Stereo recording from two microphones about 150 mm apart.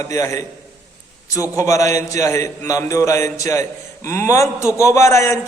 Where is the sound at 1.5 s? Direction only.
20° left (ahead or behind).